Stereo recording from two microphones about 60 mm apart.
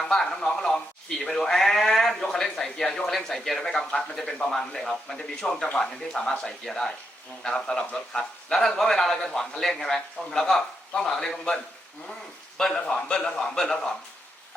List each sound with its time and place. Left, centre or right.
0.0 s speech: centre